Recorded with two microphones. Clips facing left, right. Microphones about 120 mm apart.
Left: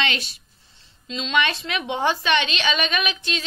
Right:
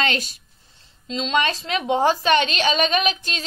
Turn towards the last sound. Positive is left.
turn(degrees=-40)  # may be behind; listen again after turning